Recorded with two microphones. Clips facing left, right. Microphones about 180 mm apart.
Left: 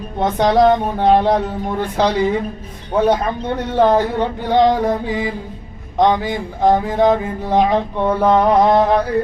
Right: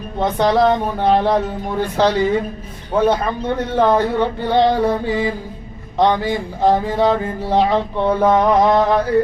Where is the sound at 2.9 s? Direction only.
15° left (ahead or behind).